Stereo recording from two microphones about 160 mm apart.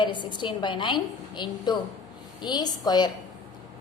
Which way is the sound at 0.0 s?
30° left (ahead or behind).